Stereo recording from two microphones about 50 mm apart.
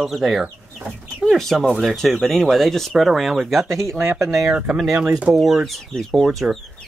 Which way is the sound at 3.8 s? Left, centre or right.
Right.